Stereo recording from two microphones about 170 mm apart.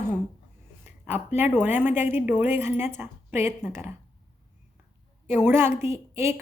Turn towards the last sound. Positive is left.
turn(degrees=-15)  # may be behind; listen again after turning